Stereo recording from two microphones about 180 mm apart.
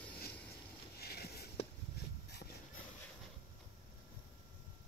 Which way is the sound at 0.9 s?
60° left (ahead or behind).